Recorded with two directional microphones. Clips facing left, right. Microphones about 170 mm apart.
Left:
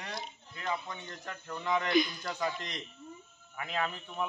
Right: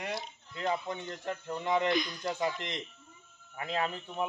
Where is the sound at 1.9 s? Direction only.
5° left (ahead or behind).